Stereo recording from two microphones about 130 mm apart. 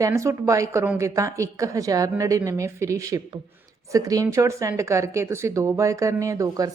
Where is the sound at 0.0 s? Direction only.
25° right (ahead or behind).